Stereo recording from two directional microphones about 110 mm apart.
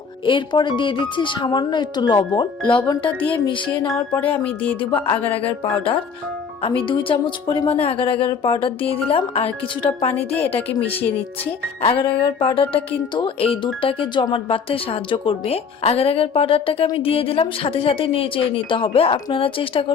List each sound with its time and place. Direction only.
0.3 s speech: 45° left (ahead or behind)
4.1 s music: 15° left (ahead or behind)
6.6 s speech: 50° left (ahead or behind)
7.7 s a woman's voice: 60° left (ahead or behind)